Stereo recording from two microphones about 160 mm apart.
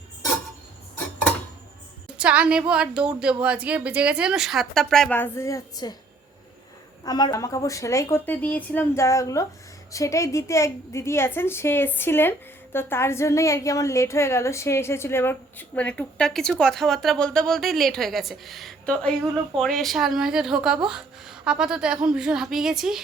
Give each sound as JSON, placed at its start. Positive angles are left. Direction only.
{"t": 2.1, "sound": "a woman's voice", "side_deg": -5}
{"t": 7.0, "sound": "a woman's voice", "side_deg": 25}